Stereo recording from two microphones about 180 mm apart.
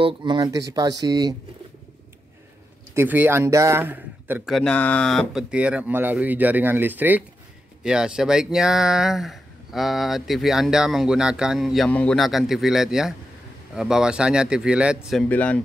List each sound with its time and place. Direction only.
0.0 s speech: 25° right (ahead or behind)
2.9 s speech: 10° right (ahead or behind)
4.6 s speech: 5° left (ahead or behind)
15.2 s speech: 10° left (ahead or behind)